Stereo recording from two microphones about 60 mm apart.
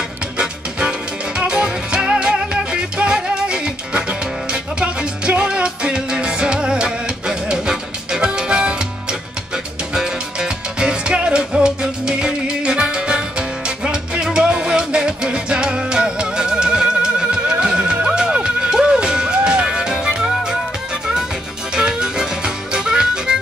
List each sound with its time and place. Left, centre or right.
0.4 s music: centre
9.9 s music: centre
21.7 s music: centre